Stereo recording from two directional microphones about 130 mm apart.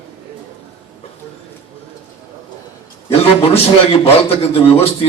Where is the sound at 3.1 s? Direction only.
50° left (ahead or behind).